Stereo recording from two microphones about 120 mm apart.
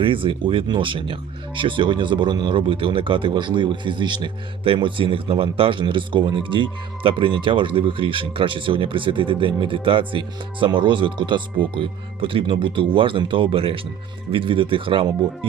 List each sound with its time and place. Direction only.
0.0 s speech: 45° right (ahead or behind)